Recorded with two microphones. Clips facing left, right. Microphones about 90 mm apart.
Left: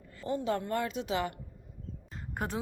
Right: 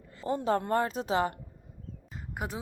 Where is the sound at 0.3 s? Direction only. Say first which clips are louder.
Right 4 dB; 40° right (ahead or behind).